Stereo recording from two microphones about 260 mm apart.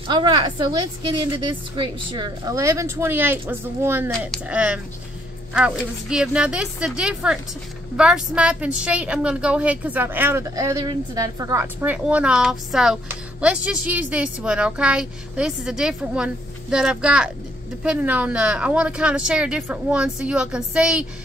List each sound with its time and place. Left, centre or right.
1.0 s a woman's voice: centre